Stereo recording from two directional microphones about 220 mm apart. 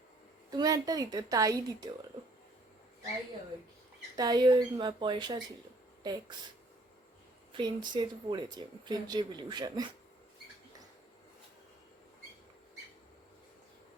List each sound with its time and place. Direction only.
0.5 s a woman's voice: 15° right (ahead or behind)
4.2 s speech: 20° right (ahead or behind)
7.5 s speech: 20° right (ahead or behind)